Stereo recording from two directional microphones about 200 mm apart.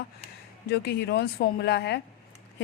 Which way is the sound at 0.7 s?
55° left (ahead or behind).